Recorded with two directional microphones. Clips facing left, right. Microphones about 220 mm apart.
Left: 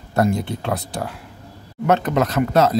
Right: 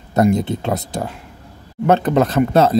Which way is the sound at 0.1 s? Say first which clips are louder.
Right 4 dB; 20° right (ahead or behind).